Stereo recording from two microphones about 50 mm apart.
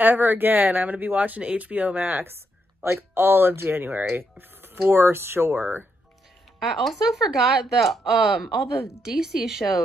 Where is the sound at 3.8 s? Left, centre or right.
Right.